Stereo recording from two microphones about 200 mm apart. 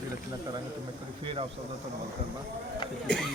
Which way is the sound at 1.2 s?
25° right (ahead or behind).